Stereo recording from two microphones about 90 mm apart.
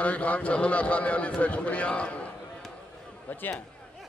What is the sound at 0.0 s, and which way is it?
A man's voice, 15° left (ahead or behind).